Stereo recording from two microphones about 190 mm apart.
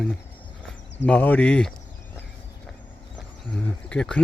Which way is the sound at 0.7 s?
70° left (ahead or behind).